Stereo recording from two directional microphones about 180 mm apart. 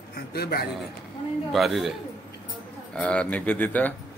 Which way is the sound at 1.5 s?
Centre (ahead or behind).